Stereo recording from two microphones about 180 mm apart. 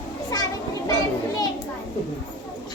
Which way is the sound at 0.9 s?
20° left (ahead or behind).